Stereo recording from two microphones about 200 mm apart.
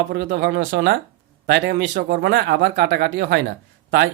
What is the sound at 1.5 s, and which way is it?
Speech, 60° right (ahead or behind).